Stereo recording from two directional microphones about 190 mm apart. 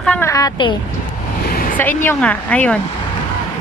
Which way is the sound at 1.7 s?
10° left (ahead or behind).